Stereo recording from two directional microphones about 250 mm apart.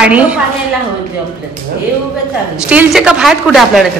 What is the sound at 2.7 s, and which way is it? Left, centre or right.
A woman's voice, centre.